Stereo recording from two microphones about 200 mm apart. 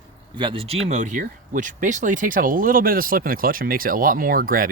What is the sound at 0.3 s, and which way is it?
Speech, 25° right (ahead or behind).